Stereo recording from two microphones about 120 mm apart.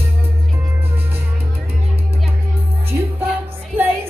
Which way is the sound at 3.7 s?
15° right (ahead or behind).